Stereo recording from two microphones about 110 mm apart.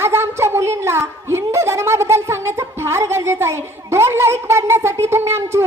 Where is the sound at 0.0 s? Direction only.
20° right (ahead or behind).